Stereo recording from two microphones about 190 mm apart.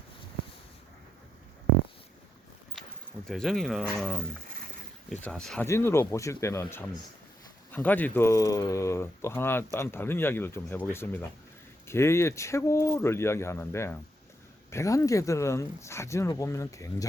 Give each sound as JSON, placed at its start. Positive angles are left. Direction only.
{"t": 3.2, "sound": "speech", "side_deg": 0}